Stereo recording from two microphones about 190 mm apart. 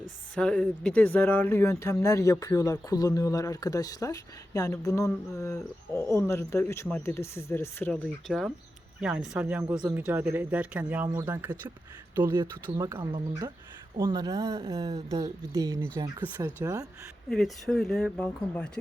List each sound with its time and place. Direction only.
0.3 s speech: 5° left (ahead or behind)
8.3 s speech: 5° right (ahead or behind)
17.2 s speech: 5° left (ahead or behind)